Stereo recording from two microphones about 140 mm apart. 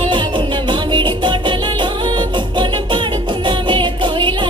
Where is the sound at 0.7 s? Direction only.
35° right (ahead or behind).